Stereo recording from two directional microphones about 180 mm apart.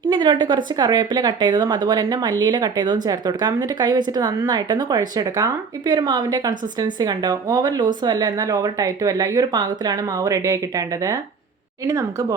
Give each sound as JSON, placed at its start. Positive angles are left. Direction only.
{"t": 0.1, "sound": "speech", "side_deg": -25}